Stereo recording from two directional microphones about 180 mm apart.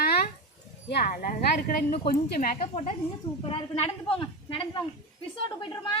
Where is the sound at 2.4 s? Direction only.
35° left (ahead or behind).